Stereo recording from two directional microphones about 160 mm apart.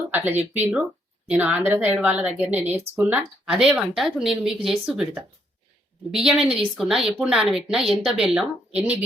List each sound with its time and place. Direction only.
0.1 s speech: 10° right (ahead or behind)
0.3 s speech: 45° right (ahead or behind)
1.3 s a woman's voice: 10° right (ahead or behind)